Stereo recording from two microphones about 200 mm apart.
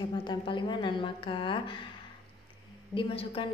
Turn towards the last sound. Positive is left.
turn(degrees=30)  # may be behind; listen again after turning